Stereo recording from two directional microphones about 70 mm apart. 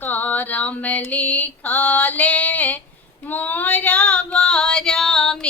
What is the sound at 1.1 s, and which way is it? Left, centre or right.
Female singing, left.